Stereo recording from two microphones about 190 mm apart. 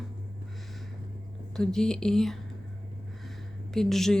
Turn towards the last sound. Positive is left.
turn(degrees=0)  # may be behind; listen again after turning